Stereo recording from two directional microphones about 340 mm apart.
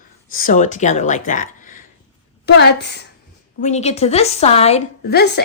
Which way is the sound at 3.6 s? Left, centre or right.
Centre.